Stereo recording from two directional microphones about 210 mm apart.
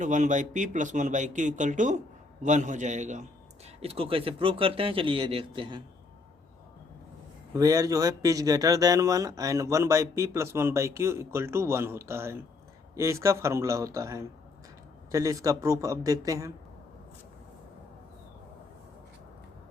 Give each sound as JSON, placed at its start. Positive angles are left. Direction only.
{"t": 0.0, "sound": "speech", "side_deg": -35}
{"t": 7.5, "sound": "speech", "side_deg": -15}